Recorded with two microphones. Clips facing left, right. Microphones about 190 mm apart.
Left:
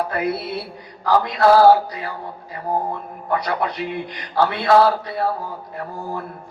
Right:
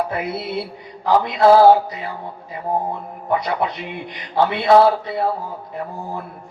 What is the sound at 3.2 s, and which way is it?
A man's voice, 20° right (ahead or behind).